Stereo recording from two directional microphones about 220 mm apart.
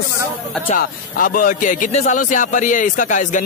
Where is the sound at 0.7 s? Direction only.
40° left (ahead or behind).